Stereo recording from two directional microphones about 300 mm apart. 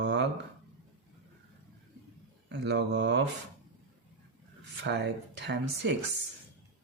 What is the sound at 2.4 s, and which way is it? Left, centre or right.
Speech, right.